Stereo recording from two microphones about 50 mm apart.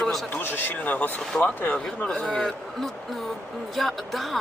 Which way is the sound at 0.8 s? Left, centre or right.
Left.